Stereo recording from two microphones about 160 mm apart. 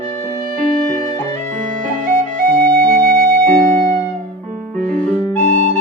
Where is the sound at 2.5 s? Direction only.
65° right (ahead or behind).